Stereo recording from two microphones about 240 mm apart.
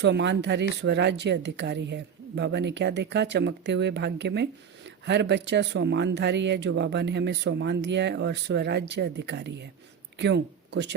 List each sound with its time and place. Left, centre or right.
0.0 s speech: right